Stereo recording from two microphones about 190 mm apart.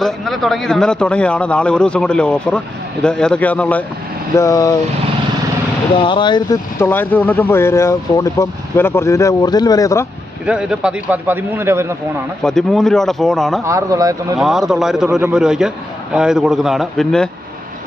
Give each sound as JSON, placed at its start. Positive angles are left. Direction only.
{"t": 0.0, "sound": "a man's voice", "side_deg": 0}
{"t": 6.0, "sound": "speech", "side_deg": 25}
{"t": 6.7, "sound": "speech", "side_deg": 10}
{"t": 10.4, "sound": "a man's voice", "side_deg": -5}
{"t": 12.4, "sound": "a man's voice", "side_deg": 5}
{"t": 13.7, "sound": "a man's voice", "side_deg": -15}
{"t": 14.3, "sound": "a man's voice", "side_deg": 0}